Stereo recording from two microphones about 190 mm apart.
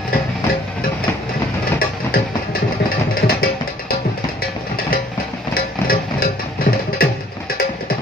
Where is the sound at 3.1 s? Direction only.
50° left (ahead or behind).